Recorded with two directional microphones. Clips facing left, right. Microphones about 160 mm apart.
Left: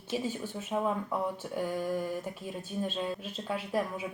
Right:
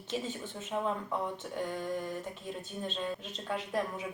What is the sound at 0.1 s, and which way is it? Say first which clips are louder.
Speech: left 3 dB; 10° left (ahead or behind).